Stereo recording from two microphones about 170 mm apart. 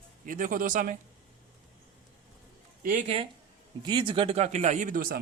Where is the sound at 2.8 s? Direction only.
50° right (ahead or behind).